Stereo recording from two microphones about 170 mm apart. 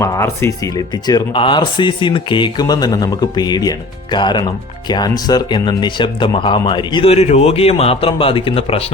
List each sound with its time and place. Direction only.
0.0 s speech: 15° left (ahead or behind); by 8.8 s 35° left (ahead or behind)